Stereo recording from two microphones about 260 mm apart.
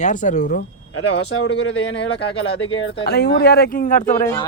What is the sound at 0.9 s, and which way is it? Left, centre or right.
Speech, left.